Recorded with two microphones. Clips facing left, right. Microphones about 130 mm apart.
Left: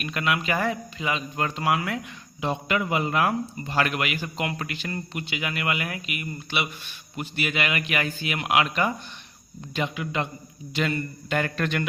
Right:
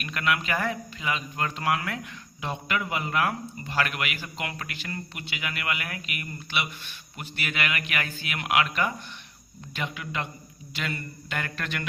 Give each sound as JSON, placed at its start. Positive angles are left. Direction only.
{"t": 0.0, "sound": "a man's voice", "side_deg": 20}